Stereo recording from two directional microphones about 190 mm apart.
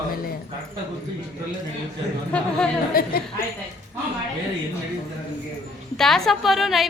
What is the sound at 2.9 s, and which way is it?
Speech, 50° left (ahead or behind).